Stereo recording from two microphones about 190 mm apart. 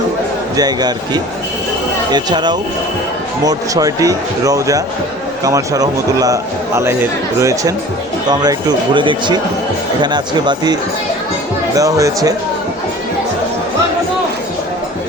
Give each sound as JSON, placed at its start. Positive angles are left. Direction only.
{"t": 0.5, "sound": "speech", "side_deg": -20}